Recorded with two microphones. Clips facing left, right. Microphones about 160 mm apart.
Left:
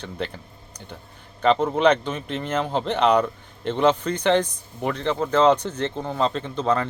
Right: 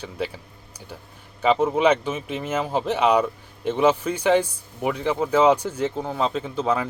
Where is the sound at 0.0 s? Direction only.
5° right (ahead or behind).